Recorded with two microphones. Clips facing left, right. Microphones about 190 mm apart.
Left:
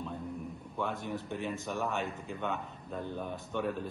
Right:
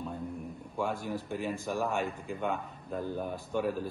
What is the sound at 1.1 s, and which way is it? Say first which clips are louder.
Speech: right 2 dB; 10° right (ahead or behind).